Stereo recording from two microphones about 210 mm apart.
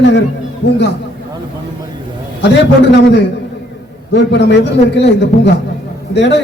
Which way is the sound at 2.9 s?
55° left (ahead or behind).